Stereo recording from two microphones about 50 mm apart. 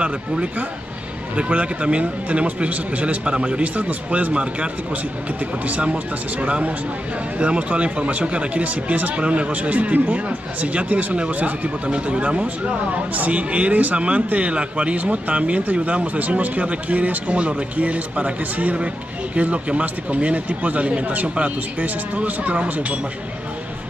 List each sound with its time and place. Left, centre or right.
0.0 s speech: right
5.7 s speech: right